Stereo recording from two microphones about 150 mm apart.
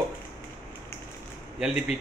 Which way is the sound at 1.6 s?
5° right (ahead or behind).